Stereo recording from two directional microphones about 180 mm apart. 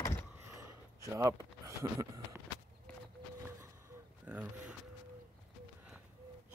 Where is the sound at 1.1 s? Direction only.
15° right (ahead or behind).